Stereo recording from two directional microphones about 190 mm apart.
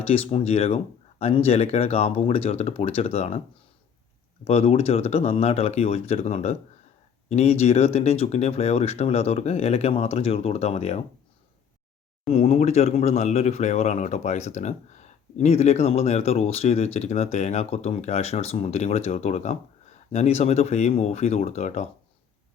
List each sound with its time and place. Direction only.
0.1 s speech: 30° left (ahead or behind)
4.4 s speech: 35° left (ahead or behind)
12.3 s speech: 35° left (ahead or behind)